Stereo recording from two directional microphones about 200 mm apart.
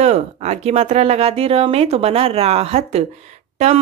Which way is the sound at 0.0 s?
35° right (ahead or behind).